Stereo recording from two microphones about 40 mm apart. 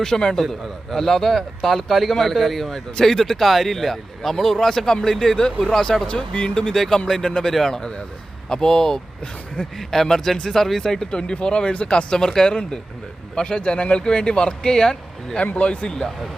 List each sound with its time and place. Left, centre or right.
0.0 s speech: centre
0.4 s a man's voice: centre
6.1 s speech: left
6.7 s speech: centre
7.5 s speech: centre
7.8 s speech: centre
12.1 s speech: centre
13.3 s speech: left
15.5 s speech: left